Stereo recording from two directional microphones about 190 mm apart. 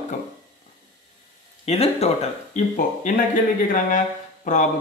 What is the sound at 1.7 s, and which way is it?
Speech, 35° left (ahead or behind).